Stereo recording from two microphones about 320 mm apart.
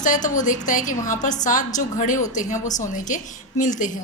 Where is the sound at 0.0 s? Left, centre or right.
Left.